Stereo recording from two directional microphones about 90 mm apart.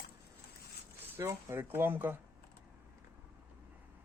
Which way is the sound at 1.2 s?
30° right (ahead or behind).